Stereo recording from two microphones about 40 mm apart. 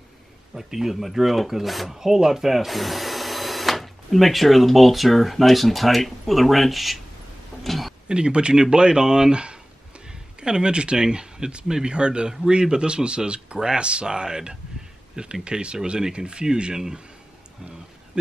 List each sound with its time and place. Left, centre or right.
0.6 s speech: centre
7.6 s a sound: centre
8.1 s speech: right
18.1 s speech: right